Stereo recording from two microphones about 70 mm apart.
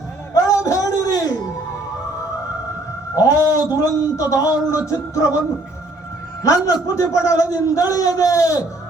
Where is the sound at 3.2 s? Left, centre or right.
Left.